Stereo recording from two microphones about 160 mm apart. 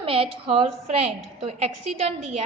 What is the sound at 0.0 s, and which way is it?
A woman's voice, 35° right (ahead or behind).